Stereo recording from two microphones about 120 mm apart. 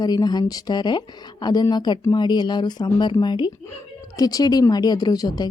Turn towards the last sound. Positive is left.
turn(degrees=35)  # may be behind; listen again after turning